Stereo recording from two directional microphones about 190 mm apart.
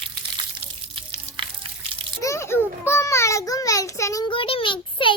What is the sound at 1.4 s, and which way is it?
Water, 25° right (ahead or behind).